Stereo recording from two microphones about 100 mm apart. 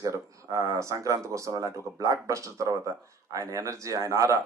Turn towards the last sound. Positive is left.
turn(degrees=-30)  # may be behind; listen again after turning